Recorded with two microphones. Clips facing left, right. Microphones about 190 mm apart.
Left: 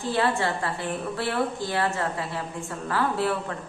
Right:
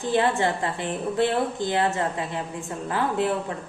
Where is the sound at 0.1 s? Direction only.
20° right (ahead or behind).